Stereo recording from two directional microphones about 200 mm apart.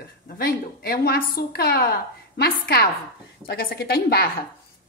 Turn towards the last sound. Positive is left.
turn(degrees=50)  # may be behind; listen again after turning